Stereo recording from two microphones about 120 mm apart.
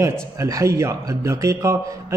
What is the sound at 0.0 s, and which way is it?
Speech, 25° right (ahead or behind).